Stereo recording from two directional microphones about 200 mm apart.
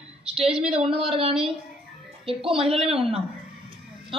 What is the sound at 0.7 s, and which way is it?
Speech, 30° right (ahead or behind).